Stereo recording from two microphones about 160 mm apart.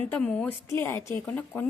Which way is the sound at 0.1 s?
10° left (ahead or behind).